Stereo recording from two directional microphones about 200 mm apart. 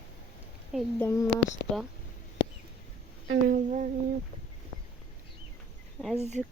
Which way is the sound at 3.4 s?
40° right (ahead or behind).